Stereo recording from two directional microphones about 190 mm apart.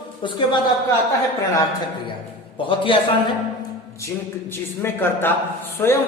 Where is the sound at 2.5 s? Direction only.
25° left (ahead or behind).